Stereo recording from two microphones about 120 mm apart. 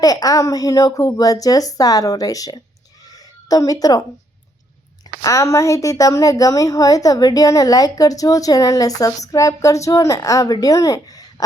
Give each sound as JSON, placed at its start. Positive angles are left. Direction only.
{"t": 0.0, "sound": "a woman's voice", "side_deg": 30}
{"t": 3.1, "sound": "a sound", "side_deg": 30}
{"t": 5.2, "sound": "a woman's voice", "side_deg": 25}